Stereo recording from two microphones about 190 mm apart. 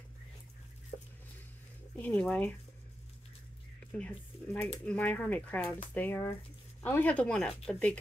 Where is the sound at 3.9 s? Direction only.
10° left (ahead or behind).